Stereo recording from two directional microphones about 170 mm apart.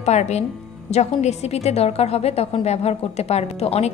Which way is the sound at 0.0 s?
40° left (ahead or behind).